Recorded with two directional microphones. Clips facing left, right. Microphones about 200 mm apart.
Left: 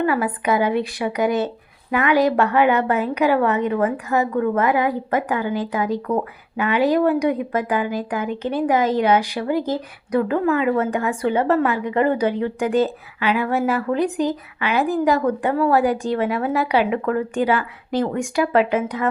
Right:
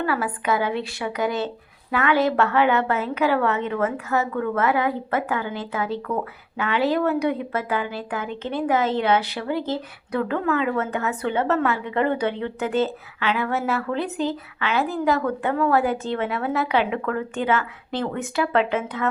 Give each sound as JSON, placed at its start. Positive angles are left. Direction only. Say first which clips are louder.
{"t": 0.0, "sound": "speech", "louder": "left 4 dB", "side_deg": 15}